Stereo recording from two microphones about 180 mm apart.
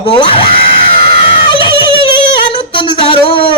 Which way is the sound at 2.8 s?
30° left (ahead or behind).